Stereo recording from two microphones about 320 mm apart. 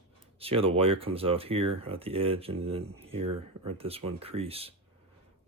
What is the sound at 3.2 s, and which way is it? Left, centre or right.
Speech, right.